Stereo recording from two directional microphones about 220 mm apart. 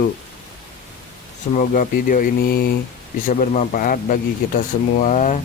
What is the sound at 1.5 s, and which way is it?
Speech, 40° left (ahead or behind).